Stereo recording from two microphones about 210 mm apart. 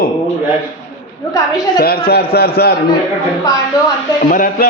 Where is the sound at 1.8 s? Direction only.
45° left (ahead or behind).